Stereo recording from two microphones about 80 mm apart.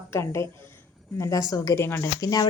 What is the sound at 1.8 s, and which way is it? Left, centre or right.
Speech, left.